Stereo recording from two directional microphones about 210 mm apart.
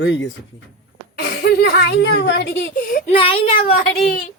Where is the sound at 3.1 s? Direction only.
25° left (ahead or behind).